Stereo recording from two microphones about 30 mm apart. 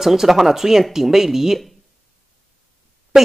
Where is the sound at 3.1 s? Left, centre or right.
Centre.